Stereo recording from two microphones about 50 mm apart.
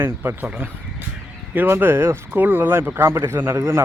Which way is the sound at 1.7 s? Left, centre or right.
Right.